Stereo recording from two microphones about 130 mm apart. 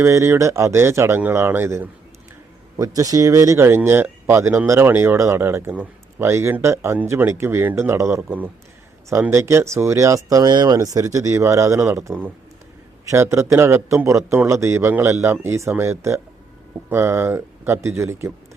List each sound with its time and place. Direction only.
0.0 s speech: 20° right (ahead or behind)